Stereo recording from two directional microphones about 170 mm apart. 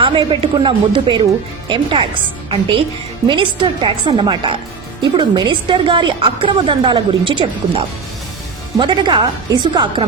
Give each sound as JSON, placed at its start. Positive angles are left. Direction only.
{"t": 0.0, "sound": "a woman's voice", "side_deg": -30}